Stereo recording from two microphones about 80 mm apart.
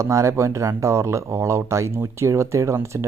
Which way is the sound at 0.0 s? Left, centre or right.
Right.